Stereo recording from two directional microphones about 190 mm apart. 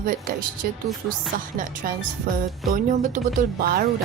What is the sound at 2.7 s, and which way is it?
Speech, 45° right (ahead or behind).